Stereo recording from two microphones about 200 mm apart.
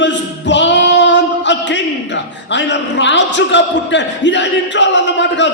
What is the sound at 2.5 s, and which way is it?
A man's voice, 65° left (ahead or behind).